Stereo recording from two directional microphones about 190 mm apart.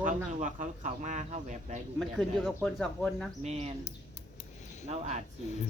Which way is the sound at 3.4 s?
35° right (ahead or behind).